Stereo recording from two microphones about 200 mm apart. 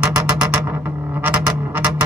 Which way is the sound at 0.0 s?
5° right (ahead or behind).